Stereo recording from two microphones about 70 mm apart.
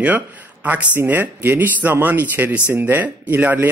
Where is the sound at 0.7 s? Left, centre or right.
Right.